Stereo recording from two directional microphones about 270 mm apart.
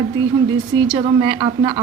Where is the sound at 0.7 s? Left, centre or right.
Centre.